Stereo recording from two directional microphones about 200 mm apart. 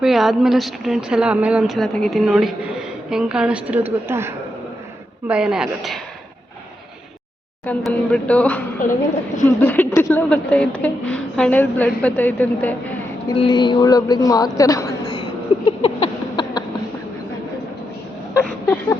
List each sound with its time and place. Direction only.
0.0 s speech: centre (ahead or behind)
7.6 s a woman's voice: 5° left (ahead or behind)
13.3 s a sound: 25° left (ahead or behind)